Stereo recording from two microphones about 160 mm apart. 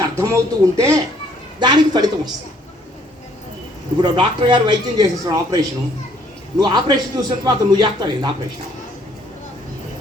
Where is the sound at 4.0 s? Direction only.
30° right (ahead or behind).